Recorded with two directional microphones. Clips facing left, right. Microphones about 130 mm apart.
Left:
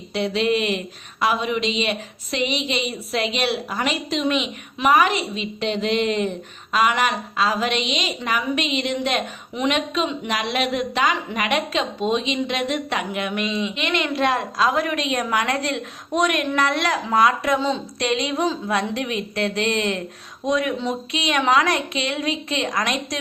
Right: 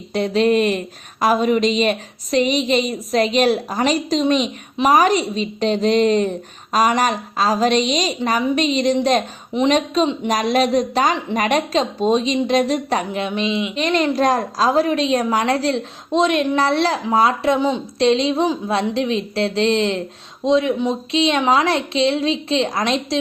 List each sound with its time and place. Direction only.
0.1 s speech: 40° right (ahead or behind); by 13.7 s 20° right (ahead or behind)
13.7 s a woman's voice: 35° right (ahead or behind)
17.6 s a woman's voice: 15° right (ahead or behind)
18.0 s a woman's voice: 30° right (ahead or behind)